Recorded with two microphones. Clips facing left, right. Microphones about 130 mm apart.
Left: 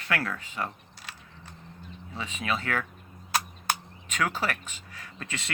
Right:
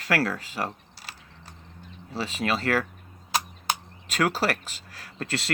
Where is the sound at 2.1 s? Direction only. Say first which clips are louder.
Right 6 dB; 35° right (ahead or behind).